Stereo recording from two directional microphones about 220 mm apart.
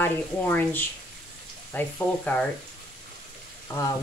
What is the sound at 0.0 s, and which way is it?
Speech, 10° left (ahead or behind).